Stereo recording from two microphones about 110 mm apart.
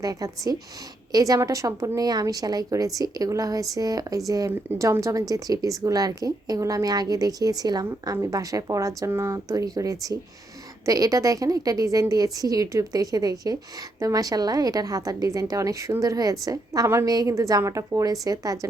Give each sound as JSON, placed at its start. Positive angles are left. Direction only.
{"t": 0.0, "sound": "a woman's voice", "side_deg": -35}